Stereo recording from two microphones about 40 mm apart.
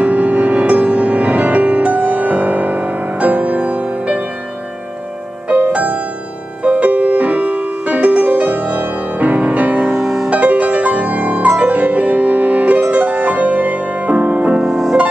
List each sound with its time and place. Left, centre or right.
0.0 s music: right
5.8 s music: right
10.0 s music: centre
10.3 s music: right
14.6 s music: centre